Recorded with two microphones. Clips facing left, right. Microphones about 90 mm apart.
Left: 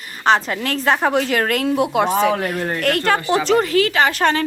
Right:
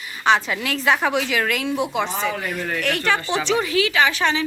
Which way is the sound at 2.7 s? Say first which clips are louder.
Left 3 dB; 45° left (ahead or behind).